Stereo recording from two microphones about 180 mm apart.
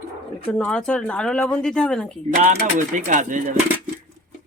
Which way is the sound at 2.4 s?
45° right (ahead or behind).